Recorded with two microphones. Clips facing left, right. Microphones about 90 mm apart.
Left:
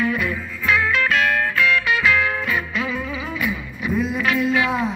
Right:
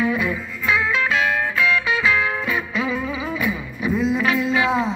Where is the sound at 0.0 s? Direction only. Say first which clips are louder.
Right 1 dB; 15° right (ahead or behind).